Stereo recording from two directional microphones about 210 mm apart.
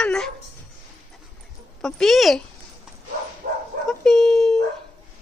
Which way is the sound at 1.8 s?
Centre (ahead or behind).